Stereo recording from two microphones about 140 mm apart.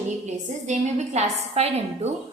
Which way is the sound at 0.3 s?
55° right (ahead or behind).